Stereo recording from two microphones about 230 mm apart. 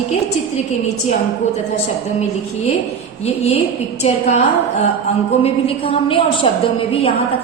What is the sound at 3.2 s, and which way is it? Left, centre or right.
A woman's voice, left.